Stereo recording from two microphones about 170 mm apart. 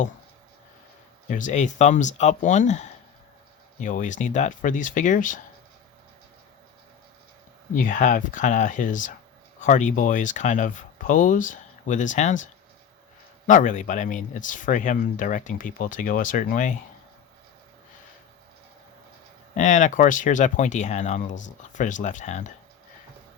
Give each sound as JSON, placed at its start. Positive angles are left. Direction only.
{"t": 1.3, "sound": "speech", "side_deg": 45}
{"t": 7.8, "sound": "speech", "side_deg": 50}
{"t": 13.5, "sound": "speech", "side_deg": 50}
{"t": 19.5, "sound": "speech", "side_deg": 45}